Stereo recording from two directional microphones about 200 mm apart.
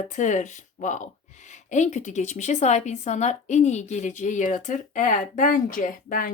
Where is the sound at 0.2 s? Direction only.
35° left (ahead or behind).